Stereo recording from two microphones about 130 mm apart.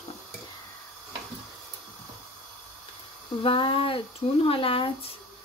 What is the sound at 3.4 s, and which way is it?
Speech, 40° left (ahead or behind).